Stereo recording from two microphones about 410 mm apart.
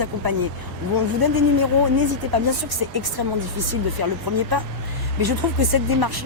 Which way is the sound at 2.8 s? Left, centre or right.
Right.